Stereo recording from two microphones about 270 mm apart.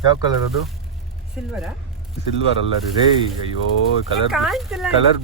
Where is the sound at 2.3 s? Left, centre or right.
Left.